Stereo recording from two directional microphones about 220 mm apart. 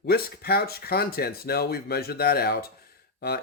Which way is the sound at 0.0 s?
45° left (ahead or behind).